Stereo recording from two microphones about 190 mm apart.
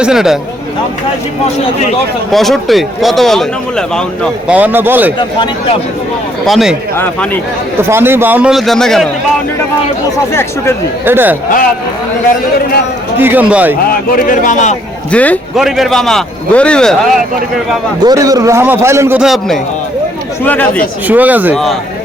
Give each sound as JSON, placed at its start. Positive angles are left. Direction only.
{"t": 0.0, "sound": "speech", "side_deg": -5}
{"t": 2.3, "sound": "speech", "side_deg": 0}
{"t": 4.5, "sound": "a man's voice", "side_deg": -10}
{"t": 6.4, "sound": "speech", "side_deg": 0}
{"t": 6.9, "sound": "speech", "side_deg": 10}
{"t": 7.8, "sound": "a man's voice", "side_deg": -10}
{"t": 11.0, "sound": "a man's voice", "side_deg": -10}
{"t": 13.1, "sound": "a man's voice", "side_deg": -10}
{"t": 14.2, "sound": "speech", "side_deg": 45}
{"t": 15.1, "sound": "speech", "side_deg": 5}
{"t": 18.0, "sound": "a man's voice", "side_deg": -20}
{"t": 20.4, "sound": "speech", "side_deg": 10}
{"t": 21.1, "sound": "a man's voice", "side_deg": -10}